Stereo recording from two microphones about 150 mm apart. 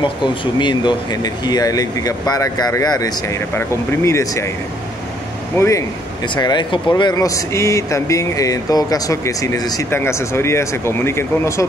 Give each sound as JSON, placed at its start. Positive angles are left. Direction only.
{"t": 0.0, "sound": "speech", "side_deg": 30}
{"t": 5.6, "sound": "speech", "side_deg": 20}
{"t": 6.2, "sound": "speech", "side_deg": 30}